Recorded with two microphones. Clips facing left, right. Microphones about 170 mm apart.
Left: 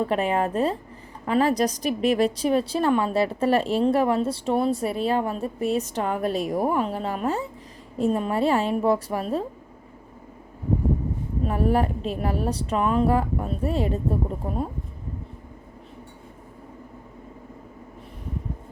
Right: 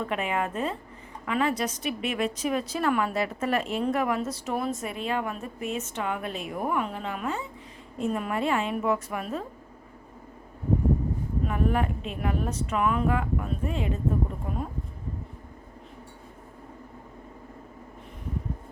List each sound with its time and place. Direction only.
0.0 s a woman's voice: 35° left (ahead or behind)
11.4 s a woman's voice: 35° left (ahead or behind)